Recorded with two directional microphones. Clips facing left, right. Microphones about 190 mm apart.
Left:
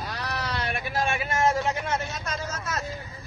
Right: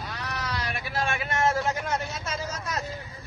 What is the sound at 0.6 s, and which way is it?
Vehicle, 50° left (ahead or behind).